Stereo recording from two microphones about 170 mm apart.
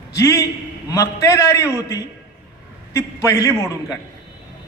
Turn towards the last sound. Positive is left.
turn(degrees=15)  # may be behind; listen again after turning